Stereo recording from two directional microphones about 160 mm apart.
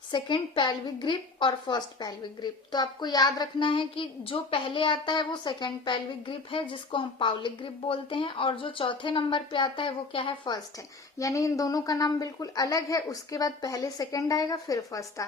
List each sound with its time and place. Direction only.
0.1 s a woman's voice: 30° left (ahead or behind)
11.2 s a woman's voice: 20° left (ahead or behind)